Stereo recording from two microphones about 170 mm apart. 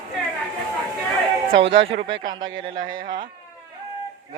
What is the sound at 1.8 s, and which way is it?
Speech, 35° right (ahead or behind).